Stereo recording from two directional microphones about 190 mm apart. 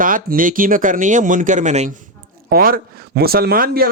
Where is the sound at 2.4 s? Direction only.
50° right (ahead or behind).